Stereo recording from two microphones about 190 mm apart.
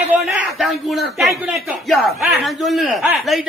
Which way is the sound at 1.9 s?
Centre (ahead or behind).